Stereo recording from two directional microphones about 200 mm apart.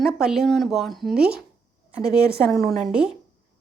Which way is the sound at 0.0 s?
Centre (ahead or behind).